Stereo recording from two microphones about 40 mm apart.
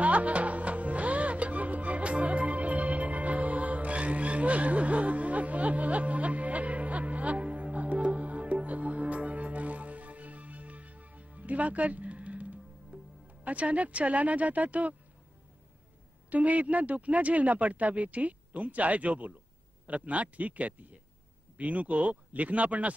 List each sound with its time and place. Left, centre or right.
0.0 s music: right
13.4 s speech: right
16.3 s speech: right